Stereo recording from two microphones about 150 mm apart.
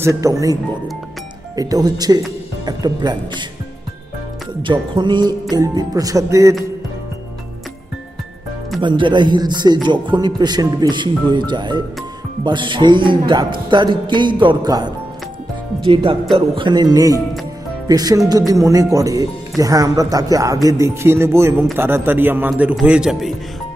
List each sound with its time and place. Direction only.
0.0 s speech: 20° right (ahead or behind)
1.6 s speech: 25° right (ahead or behind)
4.6 s speech: 30° right (ahead or behind)
8.8 s music: 30° right (ahead or behind)
16.3 s a man's voice: 35° right (ahead or behind); by 23.3 s 5° right (ahead or behind)